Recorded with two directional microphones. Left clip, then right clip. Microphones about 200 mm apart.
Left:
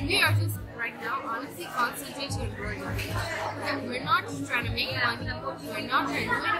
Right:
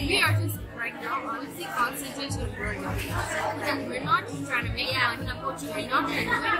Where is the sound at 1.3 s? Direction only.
20° left (ahead or behind).